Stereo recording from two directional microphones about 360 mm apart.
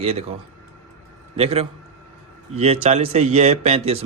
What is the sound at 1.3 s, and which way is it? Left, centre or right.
Speech, centre.